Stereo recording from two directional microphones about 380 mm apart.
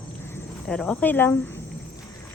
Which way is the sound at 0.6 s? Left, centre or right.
Centre.